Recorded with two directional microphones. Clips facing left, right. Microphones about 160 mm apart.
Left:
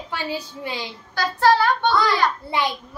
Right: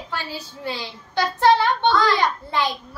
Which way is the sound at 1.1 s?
20° right (ahead or behind).